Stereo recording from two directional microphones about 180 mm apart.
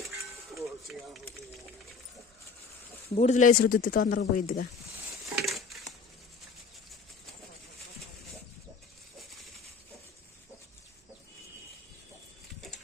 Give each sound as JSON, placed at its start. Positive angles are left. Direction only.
{"t": 0.5, "sound": "music", "side_deg": 0}
{"t": 3.2, "sound": "speech", "side_deg": 40}
{"t": 5.3, "sound": "crushing", "side_deg": 0}